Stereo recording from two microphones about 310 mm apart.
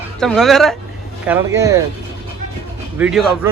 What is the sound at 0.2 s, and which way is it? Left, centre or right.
Speech, centre.